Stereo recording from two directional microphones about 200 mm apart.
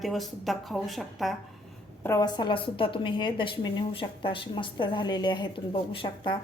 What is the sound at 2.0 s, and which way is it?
A woman's voice, 15° left (ahead or behind).